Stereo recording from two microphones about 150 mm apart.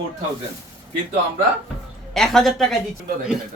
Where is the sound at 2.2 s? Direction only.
Centre (ahead or behind).